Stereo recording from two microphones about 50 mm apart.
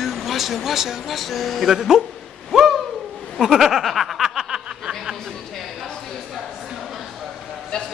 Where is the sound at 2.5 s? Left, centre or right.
Centre.